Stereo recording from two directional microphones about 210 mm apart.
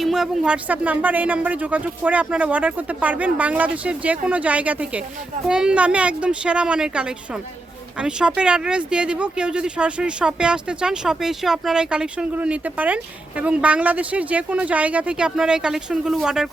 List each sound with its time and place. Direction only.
0.0 s speech: centre (ahead or behind)